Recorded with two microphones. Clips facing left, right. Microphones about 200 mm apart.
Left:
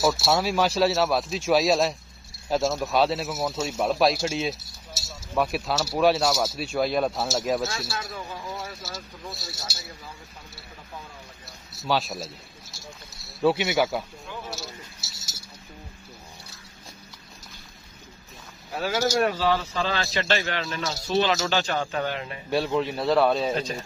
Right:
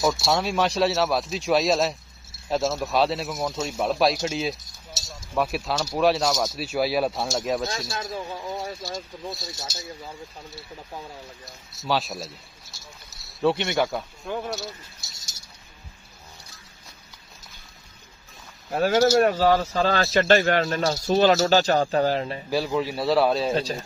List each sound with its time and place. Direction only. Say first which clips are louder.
0.0 s speech: even; centre (ahead or behind)
6.7 s speech: right 1 dB; 5° right (ahead or behind)
7.9 s speech: right 3 dB; 30° right (ahead or behind)
11.8 s speech: even; centre (ahead or behind)
14.3 s speech: right 12 dB; 55° right (ahead or behind)
15.0 s a sound: left 3 dB; 5° left (ahead or behind)
18.7 s speech: right 6 dB; 50° right (ahead or behind); by 22.4 s 35° right (ahead or behind)
22.5 s speech: left 1 dB; centre (ahead or behind)
23.5 s speech: right 3 dB; 35° right (ahead or behind)